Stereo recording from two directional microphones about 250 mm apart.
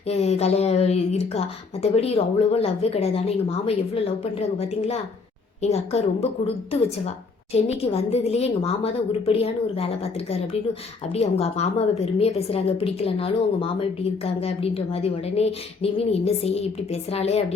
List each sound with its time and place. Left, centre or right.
0.1 s a woman's voice: left
7.5 s a woman's voice: left